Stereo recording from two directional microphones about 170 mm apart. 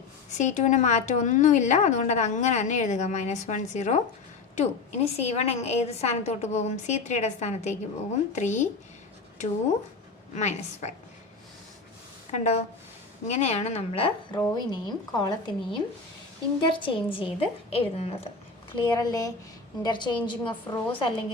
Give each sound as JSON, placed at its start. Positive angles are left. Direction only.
{"t": 0.3, "sound": "a woman's voice", "side_deg": 45}
{"t": 10.3, "sound": "a woman's voice", "side_deg": 40}
{"t": 12.3, "sound": "a woman's voice", "side_deg": 40}
{"t": 18.7, "sound": "a woman's voice", "side_deg": 25}